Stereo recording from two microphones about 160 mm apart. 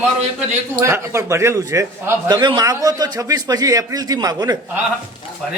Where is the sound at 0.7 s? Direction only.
15° right (ahead or behind).